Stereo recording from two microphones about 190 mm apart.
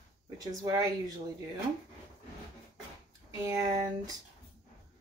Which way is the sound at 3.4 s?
20° right (ahead or behind).